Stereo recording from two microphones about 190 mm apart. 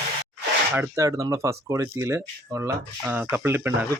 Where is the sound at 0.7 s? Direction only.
15° right (ahead or behind).